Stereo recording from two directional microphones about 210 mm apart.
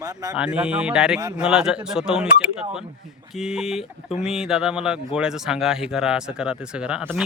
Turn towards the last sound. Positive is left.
turn(degrees=-5)  # may be behind; listen again after turning